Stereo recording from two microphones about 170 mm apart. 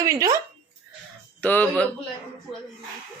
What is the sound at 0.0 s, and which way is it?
Speech, 20° right (ahead or behind).